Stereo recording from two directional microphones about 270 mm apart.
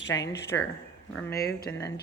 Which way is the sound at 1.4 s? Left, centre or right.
Left.